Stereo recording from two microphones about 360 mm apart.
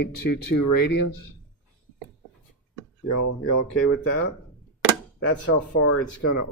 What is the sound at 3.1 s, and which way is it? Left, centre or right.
Speech, left.